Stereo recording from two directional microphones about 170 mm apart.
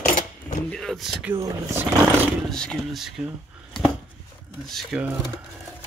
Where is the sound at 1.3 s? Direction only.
15° right (ahead or behind).